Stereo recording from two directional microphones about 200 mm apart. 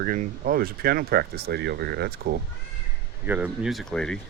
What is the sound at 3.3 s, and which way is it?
Speech, 5° right (ahead or behind).